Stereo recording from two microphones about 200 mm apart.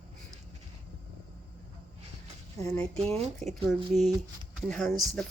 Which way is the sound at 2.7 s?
5° left (ahead or behind).